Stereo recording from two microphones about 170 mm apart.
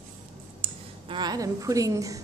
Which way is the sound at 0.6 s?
35° right (ahead or behind).